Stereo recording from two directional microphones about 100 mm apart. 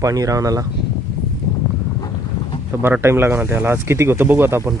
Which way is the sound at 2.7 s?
25° right (ahead or behind).